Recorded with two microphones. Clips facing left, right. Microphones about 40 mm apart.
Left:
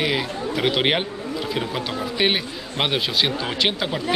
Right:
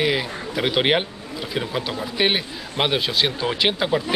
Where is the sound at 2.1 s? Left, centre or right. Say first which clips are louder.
Right 1 dB; centre.